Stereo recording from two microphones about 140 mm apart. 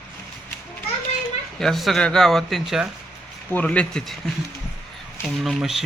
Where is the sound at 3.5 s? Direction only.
10° left (ahead or behind).